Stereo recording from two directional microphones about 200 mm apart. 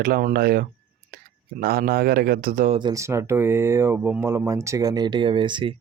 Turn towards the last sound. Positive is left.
turn(degrees=-25)  # may be behind; listen again after turning